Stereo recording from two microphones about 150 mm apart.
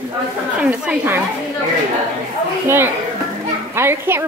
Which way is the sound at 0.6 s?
10° right (ahead or behind).